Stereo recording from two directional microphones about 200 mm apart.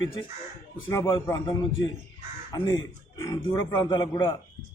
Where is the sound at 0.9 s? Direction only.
15° left (ahead or behind).